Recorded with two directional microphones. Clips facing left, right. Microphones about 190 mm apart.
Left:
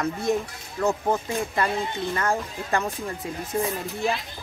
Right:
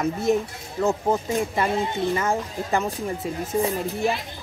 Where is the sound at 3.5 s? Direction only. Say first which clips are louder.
Right 3 dB; 35° right (ahead or behind).